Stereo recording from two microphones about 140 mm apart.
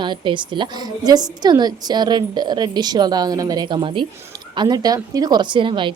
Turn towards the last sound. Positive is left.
turn(degrees=-35)  # may be behind; listen again after turning